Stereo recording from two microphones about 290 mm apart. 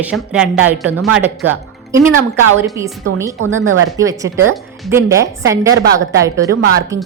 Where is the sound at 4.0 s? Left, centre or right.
Centre.